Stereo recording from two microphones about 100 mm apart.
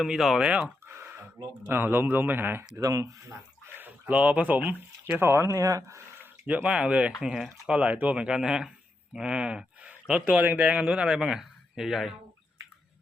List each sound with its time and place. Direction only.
0.0 s speech: centre (ahead or behind)
0.9 s a sound: 25° right (ahead or behind)
1.6 s speech: 20° right (ahead or behind)
2.8 s speech: 35° right (ahead or behind)
3.8 s speech: 15° right (ahead or behind)
6.1 s speech: 15° right (ahead or behind)